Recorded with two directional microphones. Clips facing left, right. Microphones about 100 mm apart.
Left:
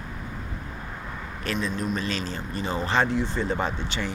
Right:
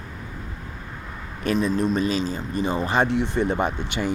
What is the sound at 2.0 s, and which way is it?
Speech, 15° right (ahead or behind).